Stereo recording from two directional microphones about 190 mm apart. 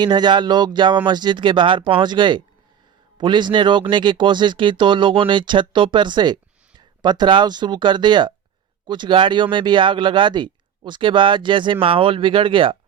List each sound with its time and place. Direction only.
0.0 s speech: 25° right (ahead or behind)